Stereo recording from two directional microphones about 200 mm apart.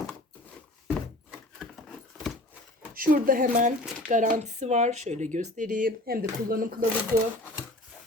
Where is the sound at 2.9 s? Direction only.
45° right (ahead or behind).